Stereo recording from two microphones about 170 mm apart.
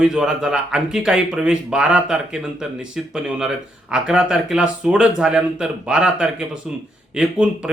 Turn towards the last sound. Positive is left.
turn(degrees=-5)  # may be behind; listen again after turning